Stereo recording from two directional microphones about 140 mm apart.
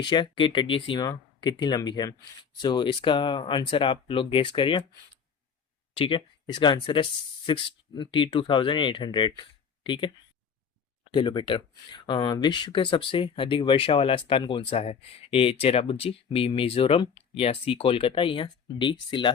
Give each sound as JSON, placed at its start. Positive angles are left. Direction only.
{"t": 0.0, "sound": "speech", "side_deg": 35}
{"t": 5.9, "sound": "speech", "side_deg": 35}
{"t": 11.1, "sound": "speech", "side_deg": 35}